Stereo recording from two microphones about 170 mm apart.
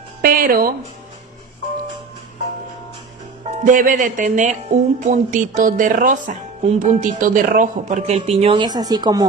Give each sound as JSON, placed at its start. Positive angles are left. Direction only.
{"t": 0.2, "sound": "music", "side_deg": -60}
{"t": 3.6, "sound": "speech", "side_deg": -50}